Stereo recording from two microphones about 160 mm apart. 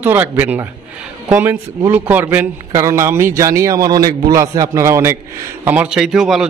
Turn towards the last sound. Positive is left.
turn(degrees=-5)  # may be behind; listen again after turning